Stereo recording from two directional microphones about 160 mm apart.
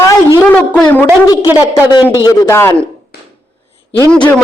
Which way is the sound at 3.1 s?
90° left.